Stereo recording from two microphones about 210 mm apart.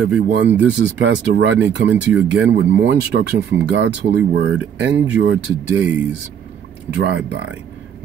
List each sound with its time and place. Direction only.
0.3 s speech: 55° right (ahead or behind)
7.0 s speech: 60° right (ahead or behind)